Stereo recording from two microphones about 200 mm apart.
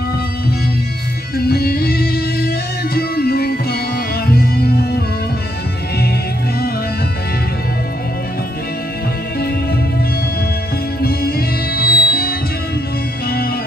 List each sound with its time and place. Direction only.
1.3 s music: 50° left (ahead or behind)
11.0 s music: 50° left (ahead or behind)